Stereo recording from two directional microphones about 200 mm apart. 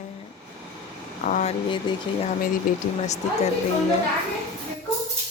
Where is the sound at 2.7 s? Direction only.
45° left (ahead or behind).